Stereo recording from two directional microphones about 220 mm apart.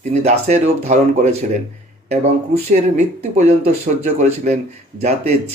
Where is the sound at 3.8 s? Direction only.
30° right (ahead or behind).